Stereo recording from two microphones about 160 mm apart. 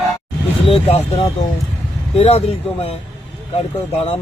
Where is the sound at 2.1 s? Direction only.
40° left (ahead or behind).